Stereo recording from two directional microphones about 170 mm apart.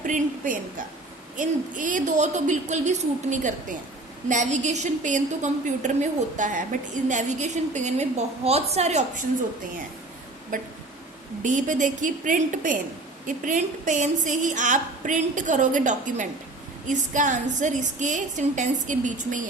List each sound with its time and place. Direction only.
0.0 s a sound: 50° right (ahead or behind)
1.4 s a woman's voice: 50° right (ahead or behind)
10.5 s a woman's voice: 50° right (ahead or behind)